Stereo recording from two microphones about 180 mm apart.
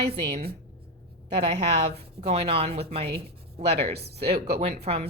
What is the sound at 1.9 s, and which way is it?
Speech, 35° right (ahead or behind).